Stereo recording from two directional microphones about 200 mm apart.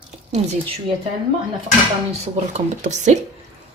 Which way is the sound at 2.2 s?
35° right (ahead or behind).